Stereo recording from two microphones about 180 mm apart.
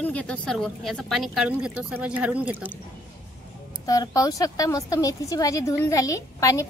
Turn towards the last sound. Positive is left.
turn(degrees=15)  # may be behind; listen again after turning